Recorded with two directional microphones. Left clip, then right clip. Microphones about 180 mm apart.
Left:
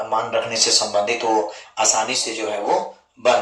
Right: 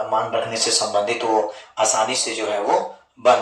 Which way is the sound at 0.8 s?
10° left (ahead or behind).